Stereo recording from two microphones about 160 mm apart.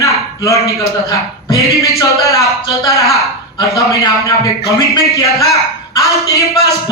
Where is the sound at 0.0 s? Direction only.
20° left (ahead or behind).